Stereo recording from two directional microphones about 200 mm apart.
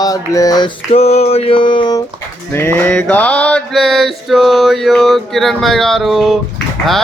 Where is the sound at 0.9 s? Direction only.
30° left (ahead or behind).